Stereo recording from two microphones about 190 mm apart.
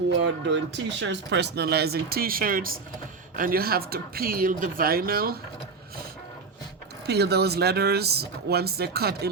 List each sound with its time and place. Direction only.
0.2 s speech: 65° right (ahead or behind); by 5.4 s 50° right (ahead or behind)
7.1 s speech: 60° right (ahead or behind)